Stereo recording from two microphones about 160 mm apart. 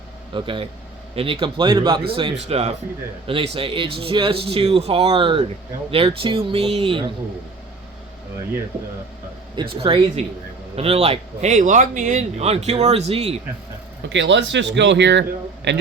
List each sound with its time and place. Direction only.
0.3 s speech: 30° right (ahead or behind)
9.6 s speech: 30° right (ahead or behind)
14.1 s speech: 90° right